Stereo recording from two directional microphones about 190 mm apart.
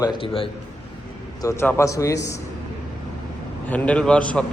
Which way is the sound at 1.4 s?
15° left (ahead or behind).